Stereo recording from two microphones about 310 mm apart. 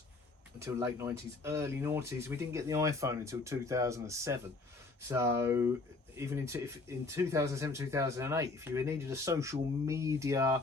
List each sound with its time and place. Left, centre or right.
0.6 s speech: centre